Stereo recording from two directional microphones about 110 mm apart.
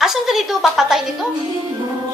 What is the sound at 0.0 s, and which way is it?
Speech, 5° right (ahead or behind).